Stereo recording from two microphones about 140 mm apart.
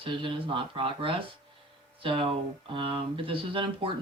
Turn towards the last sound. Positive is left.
turn(degrees=-40)  # may be behind; listen again after turning